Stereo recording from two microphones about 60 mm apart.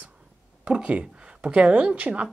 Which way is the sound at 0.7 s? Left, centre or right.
Centre.